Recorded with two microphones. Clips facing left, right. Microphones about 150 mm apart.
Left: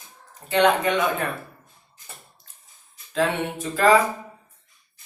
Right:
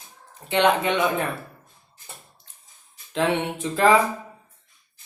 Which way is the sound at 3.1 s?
20° right (ahead or behind).